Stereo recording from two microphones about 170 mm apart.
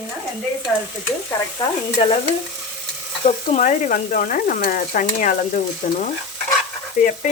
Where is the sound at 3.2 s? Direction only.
45° left (ahead or behind).